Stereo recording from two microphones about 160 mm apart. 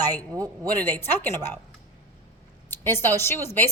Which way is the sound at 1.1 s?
15° left (ahead or behind).